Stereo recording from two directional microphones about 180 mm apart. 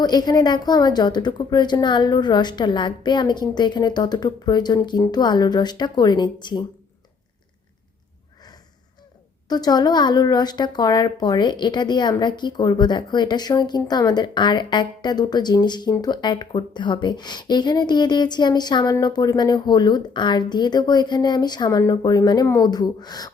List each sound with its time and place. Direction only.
0.0 s speech: 25° left (ahead or behind)
9.5 s speech: 20° left (ahead or behind)